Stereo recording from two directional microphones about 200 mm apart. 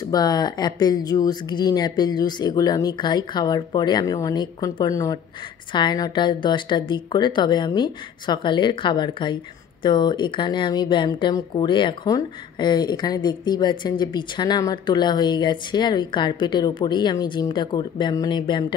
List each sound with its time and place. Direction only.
0.1 s speech: 20° left (ahead or behind)